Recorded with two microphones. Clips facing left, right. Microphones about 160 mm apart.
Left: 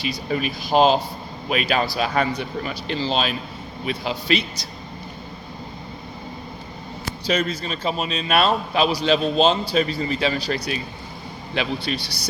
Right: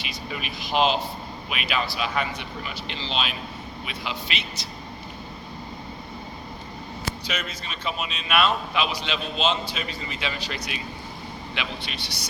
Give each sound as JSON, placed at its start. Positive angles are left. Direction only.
{"t": 0.0, "sound": "a man's voice", "side_deg": 40}
{"t": 7.3, "sound": "a man's voice", "side_deg": 35}